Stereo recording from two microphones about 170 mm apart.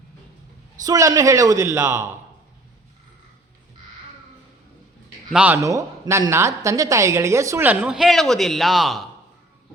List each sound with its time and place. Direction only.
0.9 s a man's voice: 20° right (ahead or behind)
5.3 s a woman's voice: 5° right (ahead or behind)
5.6 s a woman's voice: 15° right (ahead or behind); by 9.0 s centre (ahead or behind)